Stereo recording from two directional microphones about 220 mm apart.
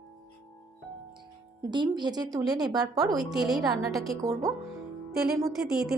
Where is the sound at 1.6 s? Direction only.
15° right (ahead or behind).